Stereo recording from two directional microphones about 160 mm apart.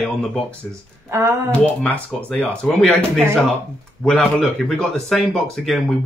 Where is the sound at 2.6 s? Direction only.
5° left (ahead or behind).